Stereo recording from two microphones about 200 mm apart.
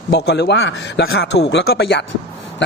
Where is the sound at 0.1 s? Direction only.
55° left (ahead or behind).